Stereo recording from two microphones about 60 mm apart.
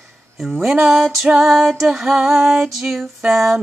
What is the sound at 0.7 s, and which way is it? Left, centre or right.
Music, centre.